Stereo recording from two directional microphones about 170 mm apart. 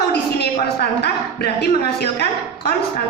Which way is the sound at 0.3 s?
70° left (ahead or behind).